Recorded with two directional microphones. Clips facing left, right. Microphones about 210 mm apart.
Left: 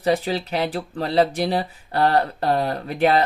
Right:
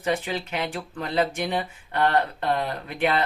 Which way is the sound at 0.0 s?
35° left (ahead or behind).